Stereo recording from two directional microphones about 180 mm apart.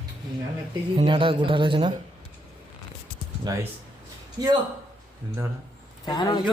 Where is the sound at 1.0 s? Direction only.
30° right (ahead or behind).